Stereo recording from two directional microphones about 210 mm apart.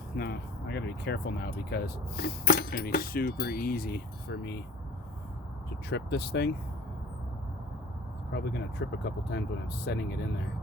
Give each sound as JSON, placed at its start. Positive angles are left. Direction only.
{"t": 0.2, "sound": "speech", "side_deg": 50}
{"t": 5.9, "sound": "speech", "side_deg": 50}
{"t": 8.3, "sound": "speech", "side_deg": 55}